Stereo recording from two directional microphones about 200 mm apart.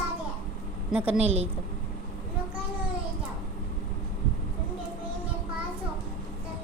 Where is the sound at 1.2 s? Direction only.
30° right (ahead or behind).